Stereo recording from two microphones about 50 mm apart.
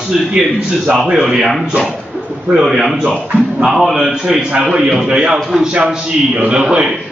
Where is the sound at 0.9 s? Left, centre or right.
Centre.